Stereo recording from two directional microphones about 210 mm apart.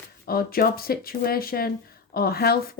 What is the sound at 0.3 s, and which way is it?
A woman's voice, 45° left (ahead or behind).